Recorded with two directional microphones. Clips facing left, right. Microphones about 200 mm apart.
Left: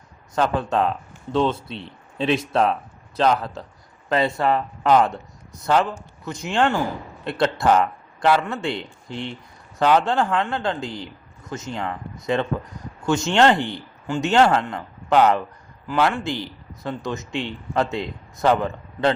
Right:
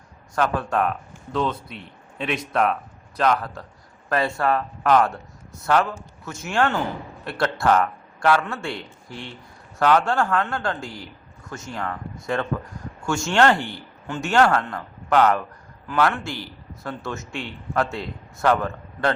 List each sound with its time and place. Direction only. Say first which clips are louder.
0.3 s a man's voice: left 2 dB; 25° left (ahead or behind)